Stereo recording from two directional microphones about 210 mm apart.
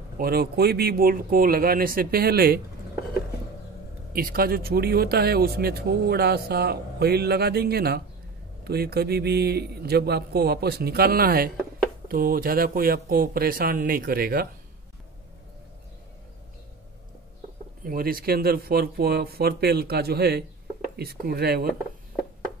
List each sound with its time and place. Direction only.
0.2 s speech: 50° right (ahead or behind)
4.1 s speech: 45° right (ahead or behind)
17.8 s speech: 45° right (ahead or behind)